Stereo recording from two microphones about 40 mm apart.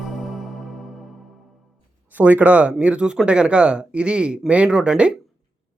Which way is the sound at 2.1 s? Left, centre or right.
Right.